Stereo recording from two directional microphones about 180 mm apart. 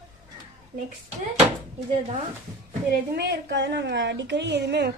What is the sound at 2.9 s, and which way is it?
A woman's voice, 65° right (ahead or behind).